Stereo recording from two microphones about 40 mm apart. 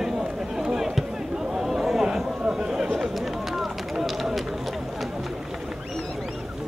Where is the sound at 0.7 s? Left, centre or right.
Centre.